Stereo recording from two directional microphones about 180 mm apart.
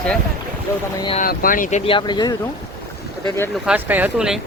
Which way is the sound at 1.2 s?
55° left (ahead or behind).